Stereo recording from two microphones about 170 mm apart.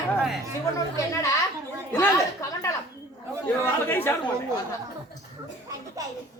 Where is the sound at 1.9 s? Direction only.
20° left (ahead or behind).